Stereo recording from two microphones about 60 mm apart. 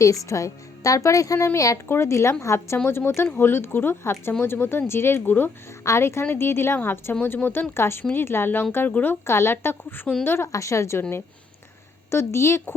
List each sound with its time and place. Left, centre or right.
0.0 s a woman's voice: left
1.9 s a woman's voice: left
5.8 s a woman's voice: left
8.9 s a woman's voice: left
9.2 s a woman's voice: left
10.5 s a woman's voice: left
12.1 s a woman's voice: left